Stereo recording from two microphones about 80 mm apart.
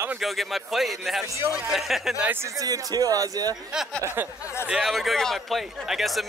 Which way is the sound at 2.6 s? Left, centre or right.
Right.